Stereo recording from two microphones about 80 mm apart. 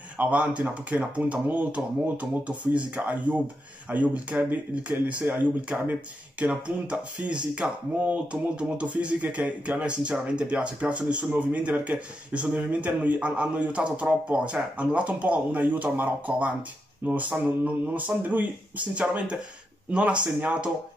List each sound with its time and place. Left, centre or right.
0.2 s a man's voice: centre